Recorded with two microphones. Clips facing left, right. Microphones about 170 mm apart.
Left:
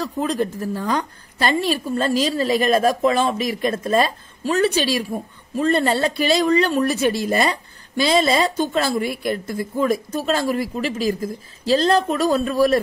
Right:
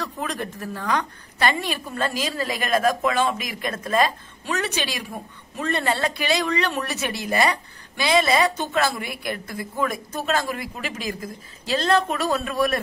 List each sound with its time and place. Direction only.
0.0 s a woman's voice: 30° left (ahead or behind)